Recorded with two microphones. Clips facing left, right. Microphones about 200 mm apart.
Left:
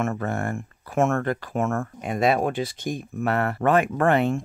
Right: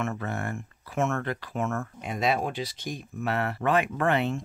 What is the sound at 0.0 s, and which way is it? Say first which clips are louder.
Speech: left 5 dB; 50° left (ahead or behind).